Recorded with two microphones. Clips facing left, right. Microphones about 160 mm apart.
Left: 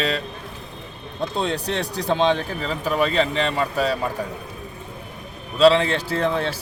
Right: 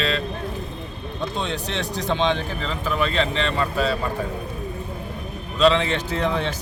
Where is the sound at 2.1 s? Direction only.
40° left (ahead or behind).